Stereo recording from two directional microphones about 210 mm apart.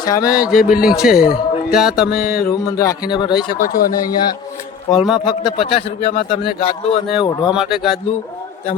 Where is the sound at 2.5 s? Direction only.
15° left (ahead or behind).